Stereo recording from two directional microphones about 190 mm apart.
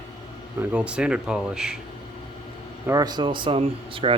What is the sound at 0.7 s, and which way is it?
Speech, 5° right (ahead or behind).